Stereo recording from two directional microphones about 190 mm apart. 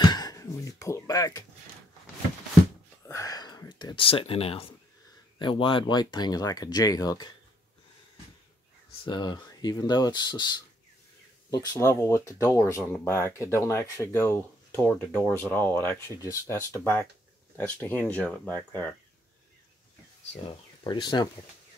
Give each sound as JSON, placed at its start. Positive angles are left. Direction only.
{"t": 0.0, "sound": "a sound", "side_deg": 20}
{"t": 3.1, "sound": "a sound", "side_deg": 15}
{"t": 5.4, "sound": "speech", "side_deg": 25}
{"t": 9.0, "sound": "speech", "side_deg": 20}
{"t": 15.2, "sound": "speech", "side_deg": -10}
{"t": 15.5, "sound": "speech", "side_deg": 10}
{"t": 20.8, "sound": "speech", "side_deg": 25}